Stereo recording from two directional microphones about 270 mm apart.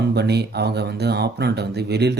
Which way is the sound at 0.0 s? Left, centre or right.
Right.